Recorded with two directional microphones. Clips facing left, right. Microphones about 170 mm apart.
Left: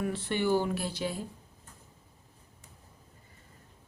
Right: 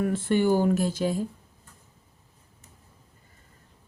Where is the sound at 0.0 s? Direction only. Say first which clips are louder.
Right 7 dB; 45° right (ahead or behind).